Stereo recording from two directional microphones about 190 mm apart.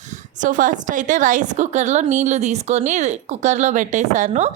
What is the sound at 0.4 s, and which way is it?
A woman's voice, 45° right (ahead or behind).